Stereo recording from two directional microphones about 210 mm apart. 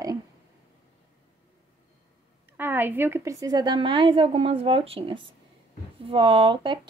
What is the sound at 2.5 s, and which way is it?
A woman's voice, 10° right (ahead or behind).